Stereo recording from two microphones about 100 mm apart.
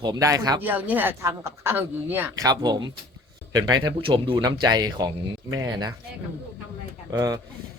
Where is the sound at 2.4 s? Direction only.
40° right (ahead or behind).